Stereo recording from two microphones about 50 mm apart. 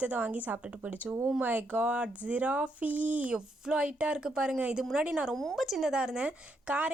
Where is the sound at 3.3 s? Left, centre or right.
Centre.